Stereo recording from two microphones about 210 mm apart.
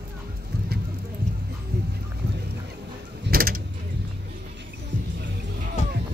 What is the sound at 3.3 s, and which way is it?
Vehicle, 45° right (ahead or behind).